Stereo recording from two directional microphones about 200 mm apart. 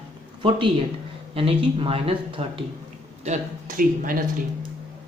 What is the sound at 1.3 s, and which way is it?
Speech, 30° right (ahead or behind).